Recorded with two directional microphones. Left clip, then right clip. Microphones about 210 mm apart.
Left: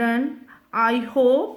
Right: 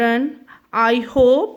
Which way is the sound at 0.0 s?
40° right (ahead or behind).